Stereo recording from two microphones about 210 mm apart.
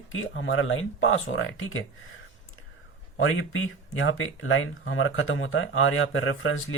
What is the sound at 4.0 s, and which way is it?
Speech, 70° left (ahead or behind).